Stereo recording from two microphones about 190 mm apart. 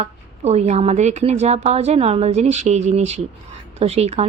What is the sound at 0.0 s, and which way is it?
A woman's voice, 35° right (ahead or behind).